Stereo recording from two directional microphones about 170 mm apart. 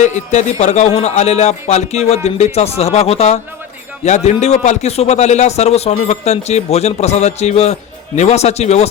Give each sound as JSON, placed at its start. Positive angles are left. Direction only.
{"t": 0.0, "sound": "speech", "side_deg": 45}